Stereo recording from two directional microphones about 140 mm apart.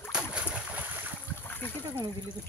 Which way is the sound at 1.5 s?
15° left (ahead or behind).